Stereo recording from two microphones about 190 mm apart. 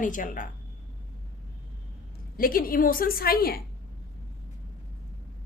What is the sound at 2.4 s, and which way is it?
A woman's voice, 50° left (ahead or behind).